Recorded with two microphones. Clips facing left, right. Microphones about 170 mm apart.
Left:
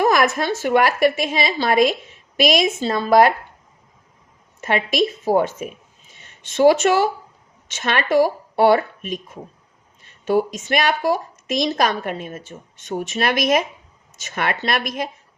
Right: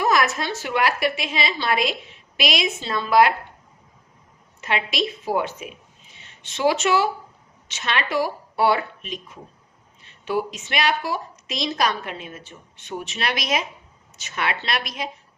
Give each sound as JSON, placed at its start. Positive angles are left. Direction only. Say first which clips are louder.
{"t": 0.0, "sound": "a woman's voice", "louder": "left 4 dB", "side_deg": 50}
{"t": 4.6, "sound": "a woman's voice", "louder": "left 6 dB", "side_deg": 45}